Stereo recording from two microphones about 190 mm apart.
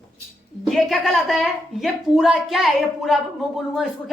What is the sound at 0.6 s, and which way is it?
A woman's voice, centre (ahead or behind).